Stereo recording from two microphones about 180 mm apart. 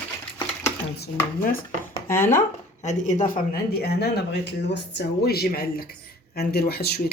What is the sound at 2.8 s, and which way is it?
Speech, 40° left (ahead or behind).